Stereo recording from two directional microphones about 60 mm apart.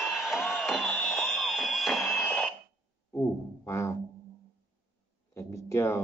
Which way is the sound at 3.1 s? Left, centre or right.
Left.